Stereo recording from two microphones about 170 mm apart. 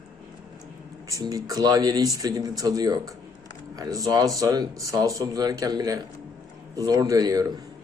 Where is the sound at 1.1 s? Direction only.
20° right (ahead or behind).